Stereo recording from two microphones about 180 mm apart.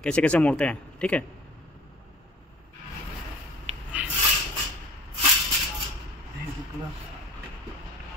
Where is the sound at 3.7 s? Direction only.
35° right (ahead or behind).